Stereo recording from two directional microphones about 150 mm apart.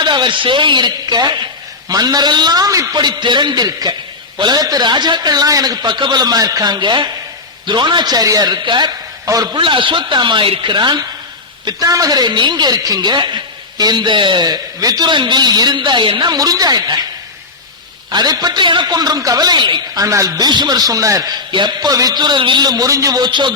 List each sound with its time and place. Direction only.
0.0 s a woman's voice: 30° right (ahead or behind)
18.1 s a woman's voice: 25° right (ahead or behind)